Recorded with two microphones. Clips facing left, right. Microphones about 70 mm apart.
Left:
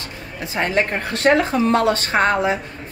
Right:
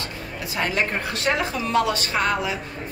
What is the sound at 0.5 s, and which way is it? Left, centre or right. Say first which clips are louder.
A woman's voice: left 4 dB; left.